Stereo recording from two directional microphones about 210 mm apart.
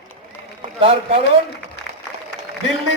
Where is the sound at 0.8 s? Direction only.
25° right (ahead or behind).